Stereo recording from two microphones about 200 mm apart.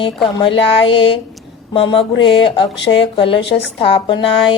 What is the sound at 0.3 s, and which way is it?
Mantra, 25° left (ahead or behind).